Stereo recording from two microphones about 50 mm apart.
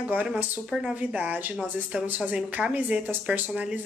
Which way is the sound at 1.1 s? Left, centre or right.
Right.